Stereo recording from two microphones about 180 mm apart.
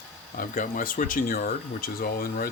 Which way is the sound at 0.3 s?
50° left (ahead or behind).